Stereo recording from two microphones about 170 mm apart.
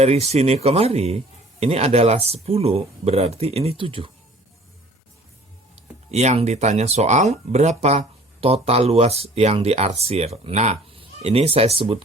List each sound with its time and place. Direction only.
0.0 s speech: 40° right (ahead or behind)
5.7 s speech: 40° right (ahead or behind)